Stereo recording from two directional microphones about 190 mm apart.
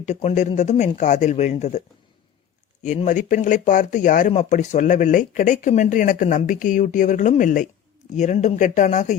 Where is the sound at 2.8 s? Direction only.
40° left (ahead or behind).